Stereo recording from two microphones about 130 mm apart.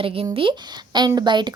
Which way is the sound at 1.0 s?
30° right (ahead or behind).